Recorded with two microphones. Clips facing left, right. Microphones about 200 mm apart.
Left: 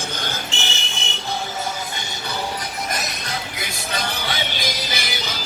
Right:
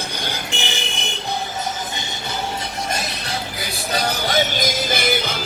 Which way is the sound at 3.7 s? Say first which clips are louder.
Right 6 dB; 40° right (ahead or behind).